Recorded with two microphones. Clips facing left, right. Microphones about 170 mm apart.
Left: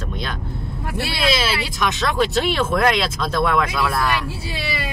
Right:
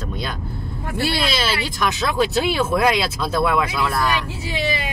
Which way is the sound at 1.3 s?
Centre (ahead or behind).